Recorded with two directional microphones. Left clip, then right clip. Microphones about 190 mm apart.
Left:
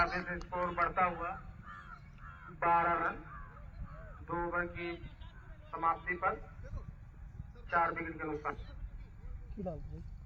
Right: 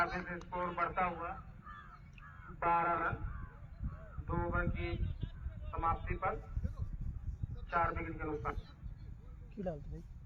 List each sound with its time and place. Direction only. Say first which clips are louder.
0.0 s a man's voice: left 3 dB; 20° left (ahead or behind)
2.6 s a man's voice: left 2 dB; 20° left (ahead or behind)
4.3 s a man's voice: left 2 dB; 20° left (ahead or behind)
7.7 s a man's voice: left 3 dB; 20° left (ahead or behind)